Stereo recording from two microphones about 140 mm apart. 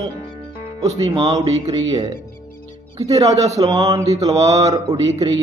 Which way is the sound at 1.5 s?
50° right (ahead or behind).